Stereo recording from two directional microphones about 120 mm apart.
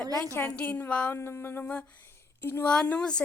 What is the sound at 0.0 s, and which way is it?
Speech, 30° right (ahead or behind).